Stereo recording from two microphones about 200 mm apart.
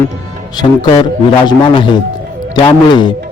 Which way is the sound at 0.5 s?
20° left (ahead or behind).